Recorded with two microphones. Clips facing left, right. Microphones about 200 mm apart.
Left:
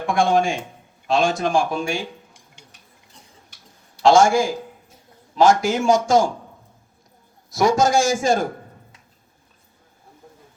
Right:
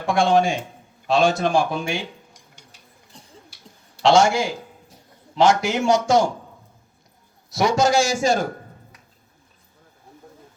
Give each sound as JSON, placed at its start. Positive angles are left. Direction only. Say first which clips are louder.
{"t": 0.1, "sound": "a sound", "louder": "right 1 dB", "side_deg": 50}
{"t": 1.1, "sound": "a man's voice", "louder": "right 1 dB", "side_deg": 50}
{"t": 4.0, "sound": "a man's voice", "louder": "left 2 dB", "side_deg": 50}
{"t": 7.5, "sound": "a man's voice", "louder": "left 1 dB", "side_deg": 50}